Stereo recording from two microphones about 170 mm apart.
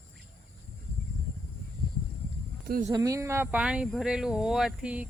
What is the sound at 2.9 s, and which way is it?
Speech, 20° right (ahead or behind).